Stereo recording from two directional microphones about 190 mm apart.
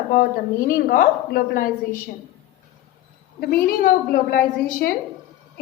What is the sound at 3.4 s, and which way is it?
A woman's voice, 50° left (ahead or behind).